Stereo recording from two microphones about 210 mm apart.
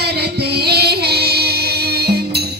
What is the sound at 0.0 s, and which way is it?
Music, 50° right (ahead or behind).